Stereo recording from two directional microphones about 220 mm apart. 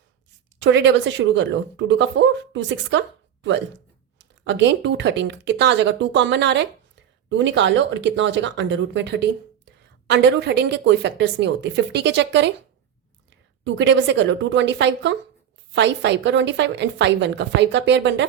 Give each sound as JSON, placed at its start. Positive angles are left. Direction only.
{"t": 0.6, "sound": "a woman's voice", "side_deg": -55}
{"t": 13.7, "sound": "a woman's voice", "side_deg": -55}